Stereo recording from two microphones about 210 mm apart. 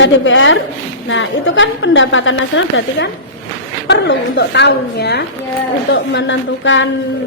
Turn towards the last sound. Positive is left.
turn(degrees=60)  # may be behind; listen again after turning